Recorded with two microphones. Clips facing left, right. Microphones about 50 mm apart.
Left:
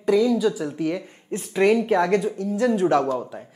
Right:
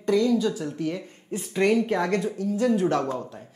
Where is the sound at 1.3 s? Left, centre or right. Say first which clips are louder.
Left 3 dB; centre.